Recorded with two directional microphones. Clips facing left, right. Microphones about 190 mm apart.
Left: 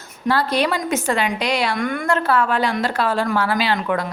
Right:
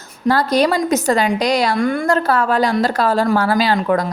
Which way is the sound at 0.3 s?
40° right (ahead or behind).